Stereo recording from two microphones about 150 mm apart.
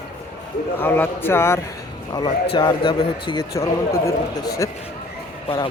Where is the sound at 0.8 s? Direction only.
15° left (ahead or behind).